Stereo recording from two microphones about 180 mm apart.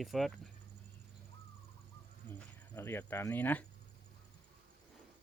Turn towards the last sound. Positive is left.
turn(degrees=10)  # may be behind; listen again after turning